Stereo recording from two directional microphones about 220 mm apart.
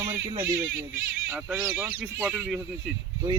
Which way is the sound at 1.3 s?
5° right (ahead or behind).